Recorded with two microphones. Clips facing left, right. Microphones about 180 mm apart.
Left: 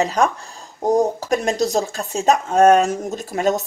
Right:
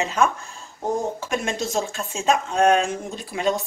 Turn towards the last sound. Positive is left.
turn(degrees=45)  # may be behind; listen again after turning